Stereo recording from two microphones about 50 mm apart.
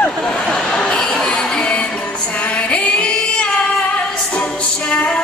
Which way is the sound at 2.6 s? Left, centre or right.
Left.